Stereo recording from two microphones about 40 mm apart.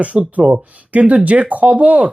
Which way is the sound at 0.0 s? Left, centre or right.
Right.